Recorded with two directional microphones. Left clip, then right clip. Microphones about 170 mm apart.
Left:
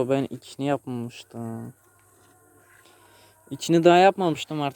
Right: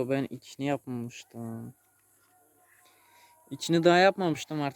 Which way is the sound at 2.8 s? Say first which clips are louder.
Left 5 dB; 10° right (ahead or behind).